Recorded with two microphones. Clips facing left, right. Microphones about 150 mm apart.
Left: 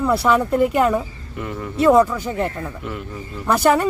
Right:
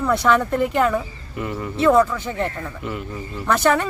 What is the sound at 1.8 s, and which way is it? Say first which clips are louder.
Speech: left 2 dB; 15° left (ahead or behind).